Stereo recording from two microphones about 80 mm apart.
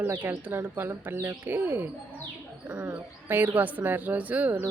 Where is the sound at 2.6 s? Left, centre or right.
Centre.